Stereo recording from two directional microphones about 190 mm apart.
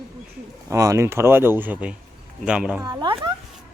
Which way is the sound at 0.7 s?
15° right (ahead or behind).